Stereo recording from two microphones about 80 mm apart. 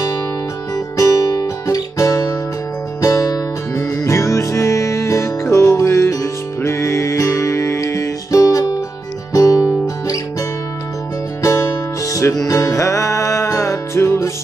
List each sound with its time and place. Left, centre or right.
0.7 s guitar: left
3.0 s music: left
11.4 s music: left